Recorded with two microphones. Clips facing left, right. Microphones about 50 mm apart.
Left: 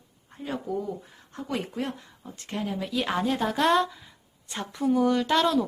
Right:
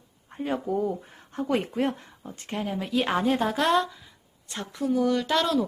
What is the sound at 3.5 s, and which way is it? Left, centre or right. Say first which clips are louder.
Speech: left 1 dB; centre.